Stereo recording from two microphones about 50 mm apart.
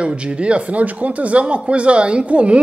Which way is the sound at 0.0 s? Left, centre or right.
Right.